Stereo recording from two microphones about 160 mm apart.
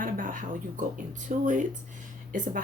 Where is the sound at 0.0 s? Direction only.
60° right (ahead or behind).